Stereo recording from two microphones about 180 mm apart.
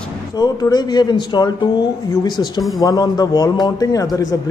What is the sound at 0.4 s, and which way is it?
A man's voice, 20° left (ahead or behind).